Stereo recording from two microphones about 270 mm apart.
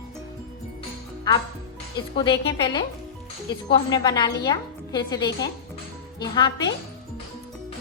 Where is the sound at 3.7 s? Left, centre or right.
Centre.